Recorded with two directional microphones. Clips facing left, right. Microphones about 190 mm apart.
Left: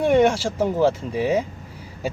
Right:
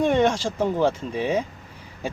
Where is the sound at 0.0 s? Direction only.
10° left (ahead or behind).